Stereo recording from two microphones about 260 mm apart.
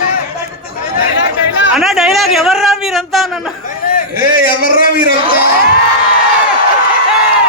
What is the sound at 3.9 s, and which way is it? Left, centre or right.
A man's voice, left.